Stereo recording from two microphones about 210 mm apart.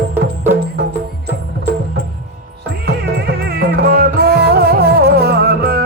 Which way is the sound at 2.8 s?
50° right (ahead or behind).